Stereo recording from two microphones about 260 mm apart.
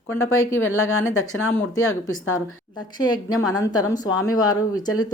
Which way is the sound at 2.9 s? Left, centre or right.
Centre.